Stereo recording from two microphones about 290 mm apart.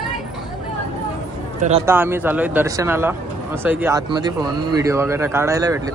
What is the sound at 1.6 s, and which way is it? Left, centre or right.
Speech, right.